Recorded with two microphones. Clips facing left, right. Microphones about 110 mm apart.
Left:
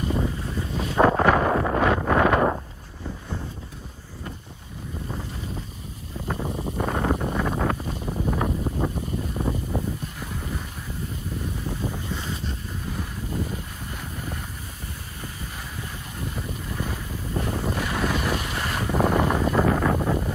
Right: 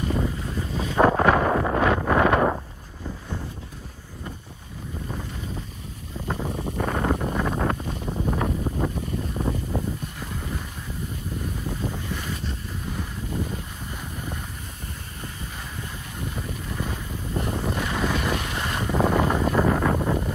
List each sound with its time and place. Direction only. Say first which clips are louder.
0.0 s boat: even; 5° left (ahead or behind)
6.2 s wind noise: even; centre (ahead or behind)
8.5 s boat: even; centre (ahead or behind)
11.6 s boat: even; centre (ahead or behind)
12.1 s boat: even; 20° left (ahead or behind)
12.4 s boat: even; centre (ahead or behind)
16.3 s boat: even; centre (ahead or behind)
17.6 s vehicle: even; 5° left (ahead or behind)
19.3 s wind noise: even; centre (ahead or behind)